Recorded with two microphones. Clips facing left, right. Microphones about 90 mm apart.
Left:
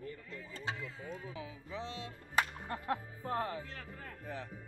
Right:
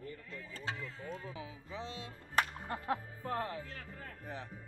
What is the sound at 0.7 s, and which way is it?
Speech, 5° left (ahead or behind).